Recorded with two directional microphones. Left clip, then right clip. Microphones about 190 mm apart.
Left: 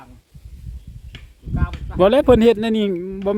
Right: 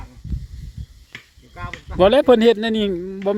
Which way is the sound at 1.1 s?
10° left (ahead or behind).